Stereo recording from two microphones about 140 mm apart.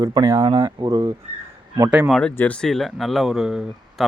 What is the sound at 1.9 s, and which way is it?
Speech, 5° right (ahead or behind).